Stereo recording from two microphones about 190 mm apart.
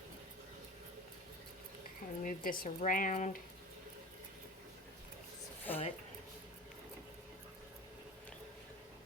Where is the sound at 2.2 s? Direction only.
45° left (ahead or behind).